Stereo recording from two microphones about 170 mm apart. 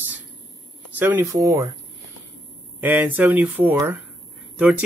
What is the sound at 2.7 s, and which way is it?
Speech, 10° right (ahead or behind).